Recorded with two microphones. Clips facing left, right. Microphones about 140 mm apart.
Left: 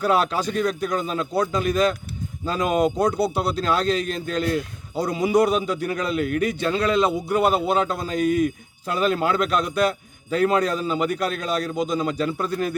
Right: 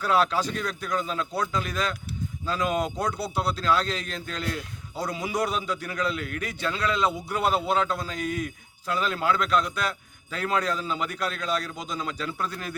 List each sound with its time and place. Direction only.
0.0 s a man's voice: 15° left (ahead or behind)